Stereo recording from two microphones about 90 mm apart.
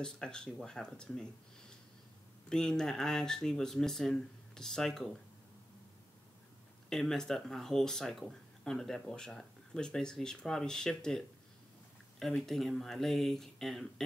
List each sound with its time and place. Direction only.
0.0 s speech: 10° left (ahead or behind)
2.5 s speech: 5° left (ahead or behind)
6.9 s speech: 5° left (ahead or behind)